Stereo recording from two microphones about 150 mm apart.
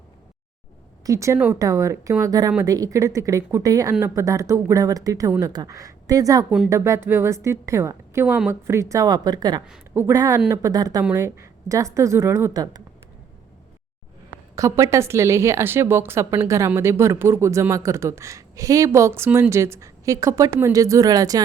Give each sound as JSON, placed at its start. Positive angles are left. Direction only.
{"t": 1.0, "sound": "speech", "side_deg": -20}
{"t": 14.5, "sound": "speech", "side_deg": -20}